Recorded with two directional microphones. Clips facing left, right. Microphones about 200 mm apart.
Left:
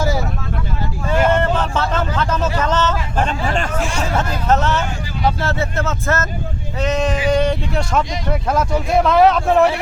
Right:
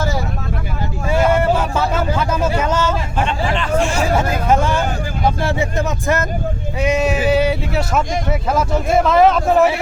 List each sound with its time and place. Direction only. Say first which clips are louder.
1.3 s speech: right 1 dB; 10° right (ahead or behind)
3.2 s speech: even; 45° left (ahead or behind)
3.8 s speech: right 4 dB; centre (ahead or behind)